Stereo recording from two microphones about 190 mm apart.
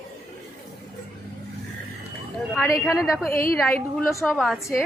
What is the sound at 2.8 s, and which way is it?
Speech, centre (ahead or behind).